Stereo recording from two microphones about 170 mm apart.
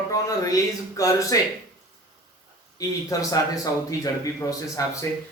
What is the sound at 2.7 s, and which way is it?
Speech, 20° left (ahead or behind).